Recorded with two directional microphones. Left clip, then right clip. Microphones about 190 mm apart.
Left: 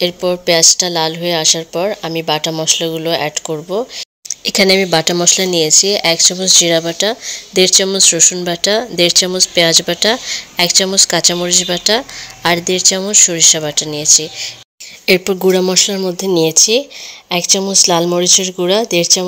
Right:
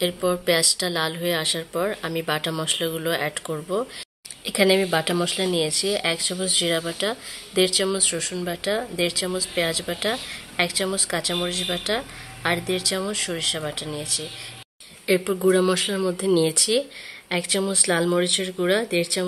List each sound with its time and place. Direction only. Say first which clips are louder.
0.0 s speech: left 8 dB; 25° left (ahead or behind)
15.4 s speech: left 6 dB; 25° left (ahead or behind)